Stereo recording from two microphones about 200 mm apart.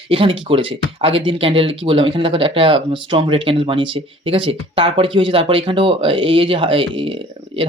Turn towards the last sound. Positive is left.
turn(degrees=-25)  # may be behind; listen again after turning